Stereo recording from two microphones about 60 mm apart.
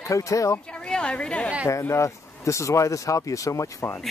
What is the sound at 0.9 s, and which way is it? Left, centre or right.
Speech, centre.